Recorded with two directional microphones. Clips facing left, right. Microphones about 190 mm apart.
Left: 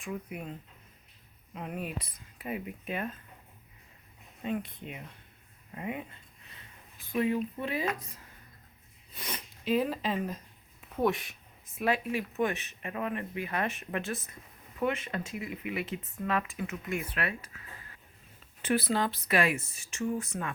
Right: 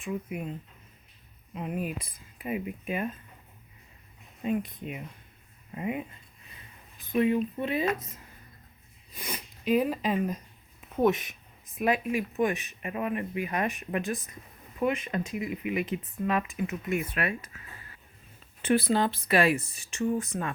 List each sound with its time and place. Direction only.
0.0 s speech: 5° right (ahead or behind)
1.5 s speech: 5° right (ahead or behind)
4.4 s speech: 15° right (ahead or behind)
7.1 s speech: 20° right (ahead or behind)
9.1 s speech: 10° right (ahead or behind)
18.6 s speech: 25° right (ahead or behind)